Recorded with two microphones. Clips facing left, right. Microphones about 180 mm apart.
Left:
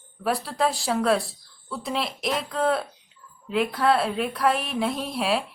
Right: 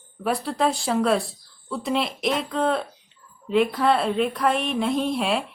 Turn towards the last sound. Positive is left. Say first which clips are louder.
# right 2 dB
turn(degrees=0)  # may be behind; listen again after turning